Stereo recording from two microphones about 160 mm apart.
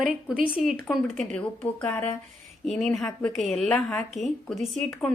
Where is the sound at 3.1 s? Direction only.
15° left (ahead or behind).